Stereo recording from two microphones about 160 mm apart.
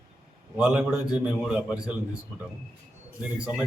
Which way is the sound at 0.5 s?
5° right (ahead or behind).